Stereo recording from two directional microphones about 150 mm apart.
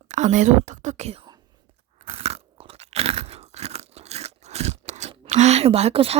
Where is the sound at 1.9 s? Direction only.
45° right (ahead or behind).